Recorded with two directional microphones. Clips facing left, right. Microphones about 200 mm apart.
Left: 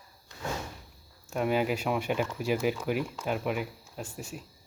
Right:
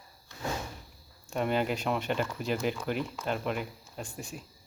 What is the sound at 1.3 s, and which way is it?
Speech, 5° left (ahead or behind).